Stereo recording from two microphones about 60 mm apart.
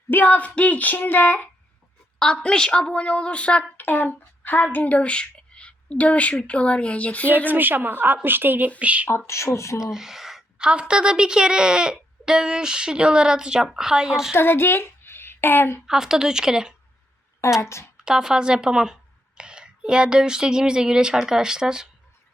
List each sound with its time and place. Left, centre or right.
0.1 s speech: left
2.1 s a woman's voice: centre
3.8 s speech: left
7.3 s a woman's voice: right
8.8 s speech: right
9.0 s speech: left
9.8 s a woman's voice: centre
14.3 s a woman's voice: left
15.9 s a woman's voice: centre
17.6 s speech: left
17.9 s a woman's voice: centre